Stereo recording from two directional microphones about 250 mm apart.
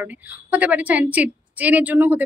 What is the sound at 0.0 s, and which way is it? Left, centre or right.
A woman's voice, centre.